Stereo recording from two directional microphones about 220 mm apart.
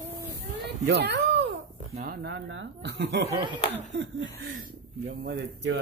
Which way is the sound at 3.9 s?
55° right (ahead or behind).